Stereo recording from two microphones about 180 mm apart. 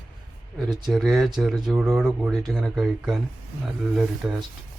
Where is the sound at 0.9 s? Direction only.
Centre (ahead or behind).